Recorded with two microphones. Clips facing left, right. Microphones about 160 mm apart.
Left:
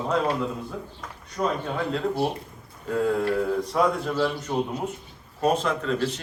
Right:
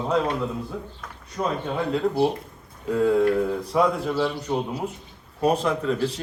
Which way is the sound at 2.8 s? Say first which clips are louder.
Right 4 dB; centre (ahead or behind).